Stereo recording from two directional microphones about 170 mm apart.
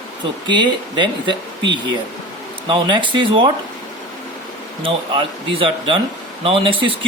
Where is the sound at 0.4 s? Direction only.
25° right (ahead or behind).